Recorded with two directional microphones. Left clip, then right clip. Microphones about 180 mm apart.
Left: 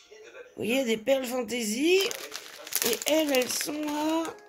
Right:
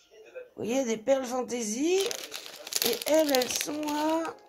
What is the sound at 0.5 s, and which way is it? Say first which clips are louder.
Speech: left 2 dB; centre (ahead or behind).